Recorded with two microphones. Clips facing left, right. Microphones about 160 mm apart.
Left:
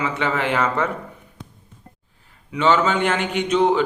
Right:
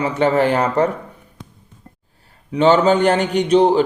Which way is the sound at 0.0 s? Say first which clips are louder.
Right 7 dB; 40° right (ahead or behind).